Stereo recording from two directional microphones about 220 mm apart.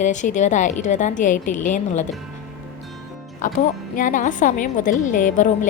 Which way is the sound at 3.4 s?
35° left (ahead or behind).